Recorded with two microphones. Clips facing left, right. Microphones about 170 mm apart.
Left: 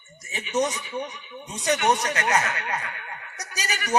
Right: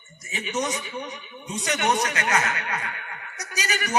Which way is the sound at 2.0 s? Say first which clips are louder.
Left 1 dB; 35° left (ahead or behind).